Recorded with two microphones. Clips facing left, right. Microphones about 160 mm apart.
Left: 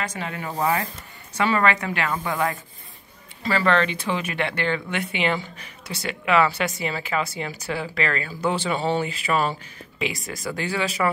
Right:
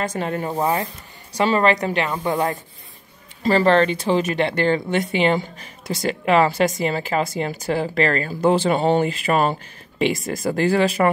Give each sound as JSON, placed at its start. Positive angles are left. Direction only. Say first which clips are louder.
{"t": 0.1, "sound": "speech", "louder": "right 7 dB", "side_deg": -45}
{"t": 2.0, "sound": "speech", "louder": "right 4 dB", "side_deg": -25}
{"t": 2.3, "sound": "speech", "louder": "right 3 dB", "side_deg": -40}
{"t": 5.4, "sound": "a woman's voice", "louder": "right 4 dB", "side_deg": -45}